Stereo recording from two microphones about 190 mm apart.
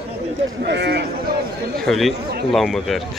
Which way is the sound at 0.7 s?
60° right (ahead or behind).